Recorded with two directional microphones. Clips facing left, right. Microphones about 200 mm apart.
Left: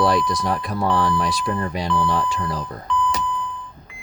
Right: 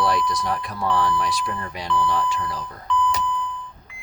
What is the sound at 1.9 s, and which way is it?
Speech, 15° left (ahead or behind).